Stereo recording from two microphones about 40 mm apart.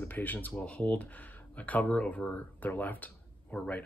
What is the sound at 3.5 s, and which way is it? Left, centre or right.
Speech, left.